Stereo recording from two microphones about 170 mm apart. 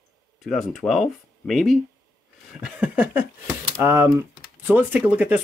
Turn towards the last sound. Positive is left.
turn(degrees=-10)  # may be behind; listen again after turning